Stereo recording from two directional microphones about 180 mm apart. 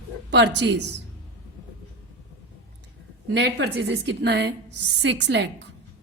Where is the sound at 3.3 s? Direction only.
70° right (ahead or behind).